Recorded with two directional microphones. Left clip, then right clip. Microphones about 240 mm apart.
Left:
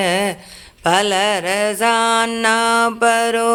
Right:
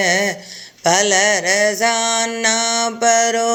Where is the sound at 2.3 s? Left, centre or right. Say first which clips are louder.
Left 1 dB; left.